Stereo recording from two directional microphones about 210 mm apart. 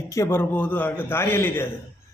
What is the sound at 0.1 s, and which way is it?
Speech, 10° left (ahead or behind).